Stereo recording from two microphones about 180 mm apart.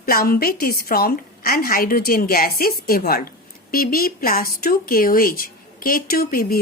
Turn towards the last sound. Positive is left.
turn(degrees=55)  # may be behind; listen again after turning